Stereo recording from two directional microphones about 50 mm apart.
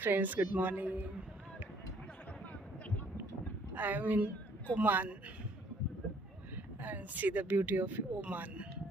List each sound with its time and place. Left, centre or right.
0.0 s speech: right
3.8 s speech: right
6.8 s speech: right